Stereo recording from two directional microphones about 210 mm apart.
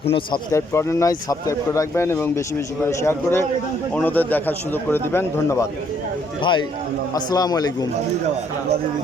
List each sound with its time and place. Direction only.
0.0 s speech: 25° left (ahead or behind)
0.5 s speech: 15° left (ahead or behind)